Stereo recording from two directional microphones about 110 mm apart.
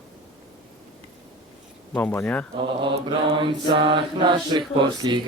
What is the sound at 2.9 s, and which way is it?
Mantra, 55° right (ahead or behind).